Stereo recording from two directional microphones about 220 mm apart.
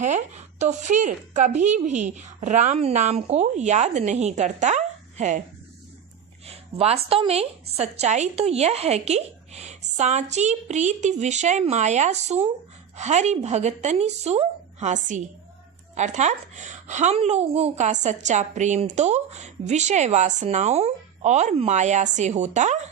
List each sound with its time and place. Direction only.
0.0 s a woman's voice: 35° right (ahead or behind)
6.7 s a woman's voice: 25° right (ahead or behind)